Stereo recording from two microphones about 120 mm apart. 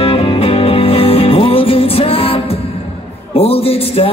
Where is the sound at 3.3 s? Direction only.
55° left (ahead or behind).